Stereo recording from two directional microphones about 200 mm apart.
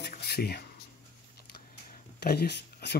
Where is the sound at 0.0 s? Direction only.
55° left (ahead or behind).